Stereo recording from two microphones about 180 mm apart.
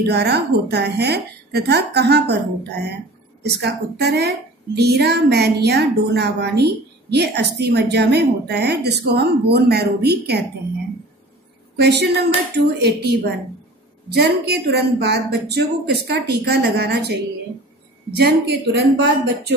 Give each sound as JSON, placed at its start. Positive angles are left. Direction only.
{"t": 0.0, "sound": "a woman's voice", "side_deg": -65}
{"t": 3.4, "sound": "a woman's voice", "side_deg": -65}
{"t": 11.7, "sound": "a woman's voice", "side_deg": -65}
{"t": 18.2, "sound": "a woman's voice", "side_deg": -65}